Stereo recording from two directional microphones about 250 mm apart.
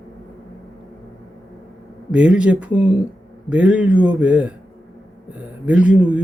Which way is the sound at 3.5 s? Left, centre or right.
Centre.